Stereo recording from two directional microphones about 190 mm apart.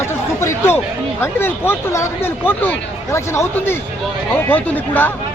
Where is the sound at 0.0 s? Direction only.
15° left (ahead or behind).